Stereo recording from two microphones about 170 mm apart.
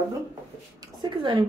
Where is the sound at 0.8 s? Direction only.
25° right (ahead or behind).